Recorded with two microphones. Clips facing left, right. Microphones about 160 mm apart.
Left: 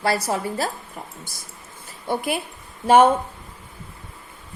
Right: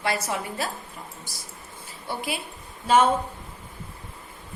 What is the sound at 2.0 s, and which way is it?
A woman's voice, 50° left (ahead or behind).